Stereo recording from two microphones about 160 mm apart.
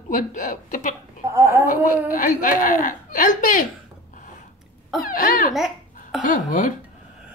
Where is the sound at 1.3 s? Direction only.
15° right (ahead or behind).